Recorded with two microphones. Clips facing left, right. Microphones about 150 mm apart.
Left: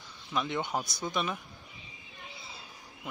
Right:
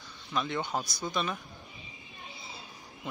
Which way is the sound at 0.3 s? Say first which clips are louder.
Even; 15° left (ahead or behind).